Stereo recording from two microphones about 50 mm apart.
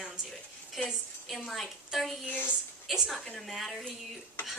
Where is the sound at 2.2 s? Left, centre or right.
Left.